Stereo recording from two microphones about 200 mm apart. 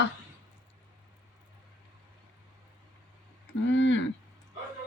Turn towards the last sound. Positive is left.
turn(degrees=65)  # may be behind; listen again after turning